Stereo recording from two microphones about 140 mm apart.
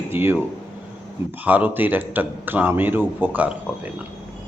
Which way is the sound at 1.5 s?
10° right (ahead or behind).